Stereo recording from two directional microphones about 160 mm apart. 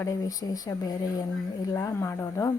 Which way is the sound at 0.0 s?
20° left (ahead or behind).